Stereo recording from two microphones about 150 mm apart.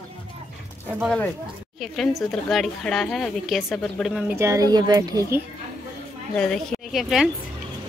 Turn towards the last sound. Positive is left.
turn(degrees=0)  # may be behind; listen again after turning